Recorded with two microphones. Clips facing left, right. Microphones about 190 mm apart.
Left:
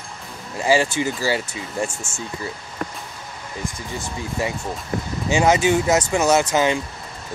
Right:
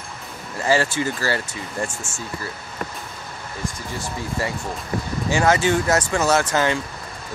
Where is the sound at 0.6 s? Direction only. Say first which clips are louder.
Left 1 dB; 15° left (ahead or behind).